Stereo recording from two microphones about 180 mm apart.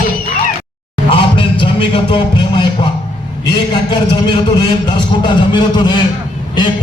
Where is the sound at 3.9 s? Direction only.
25° left (ahead or behind).